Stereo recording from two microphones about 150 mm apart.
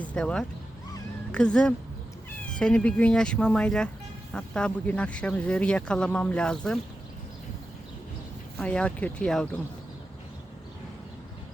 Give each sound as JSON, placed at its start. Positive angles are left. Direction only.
{"t": 0.0, "sound": "speech", "side_deg": 10}
{"t": 8.5, "sound": "speech", "side_deg": 5}